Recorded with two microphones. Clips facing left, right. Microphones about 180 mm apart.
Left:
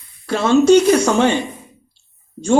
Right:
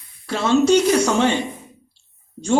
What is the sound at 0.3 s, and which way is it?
Speech, 50° left (ahead or behind).